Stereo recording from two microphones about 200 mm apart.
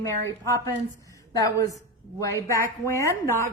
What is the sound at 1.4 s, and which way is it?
A woman's voice, 15° left (ahead or behind).